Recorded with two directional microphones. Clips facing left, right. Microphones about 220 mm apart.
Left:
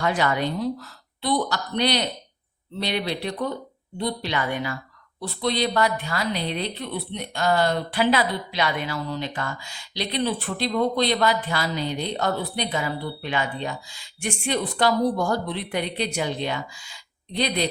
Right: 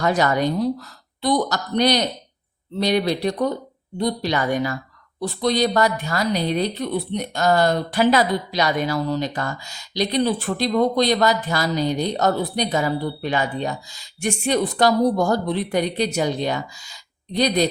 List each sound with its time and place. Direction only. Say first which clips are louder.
0.0 s speech: right 4 dB; 40° right (ahead or behind)